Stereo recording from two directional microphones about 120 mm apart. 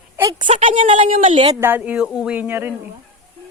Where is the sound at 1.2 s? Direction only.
75° right (ahead or behind).